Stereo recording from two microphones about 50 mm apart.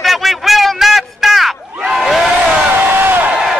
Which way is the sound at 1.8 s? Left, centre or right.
Centre.